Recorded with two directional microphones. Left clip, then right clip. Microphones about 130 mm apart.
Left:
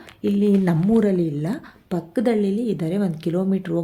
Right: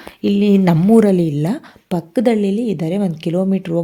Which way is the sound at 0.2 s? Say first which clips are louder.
Right 5 dB; 35° right (ahead or behind).